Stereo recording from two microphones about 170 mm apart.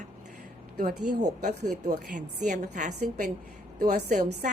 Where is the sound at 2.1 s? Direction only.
50° right (ahead or behind).